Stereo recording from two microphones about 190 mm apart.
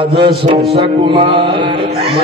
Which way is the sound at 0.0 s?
25° right (ahead or behind).